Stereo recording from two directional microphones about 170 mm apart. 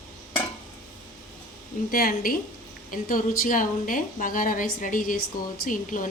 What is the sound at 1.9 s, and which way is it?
A woman's voice, 60° left (ahead or behind).